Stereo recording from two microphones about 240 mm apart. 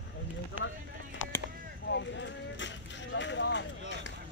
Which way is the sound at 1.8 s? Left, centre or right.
Left.